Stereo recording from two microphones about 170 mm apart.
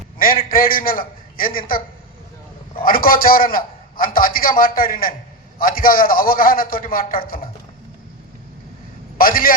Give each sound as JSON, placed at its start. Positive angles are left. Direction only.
{"t": 0.2, "sound": "a man's voice", "side_deg": 55}
{"t": 2.8, "sound": "a man's voice", "side_deg": 55}
{"t": 9.1, "sound": "a man's voice", "side_deg": 60}